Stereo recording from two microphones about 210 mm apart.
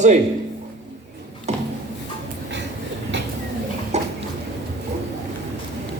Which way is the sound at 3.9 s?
30° right (ahead or behind).